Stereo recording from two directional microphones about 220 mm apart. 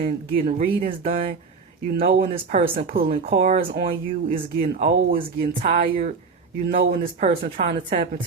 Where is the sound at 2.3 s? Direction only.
30° right (ahead or behind).